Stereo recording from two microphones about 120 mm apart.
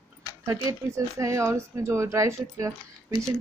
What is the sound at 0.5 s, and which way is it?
Speech, 25° right (ahead or behind).